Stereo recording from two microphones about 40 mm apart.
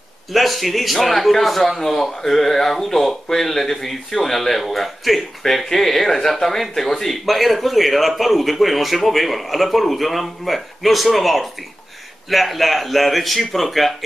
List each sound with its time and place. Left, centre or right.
0.3 s speech: centre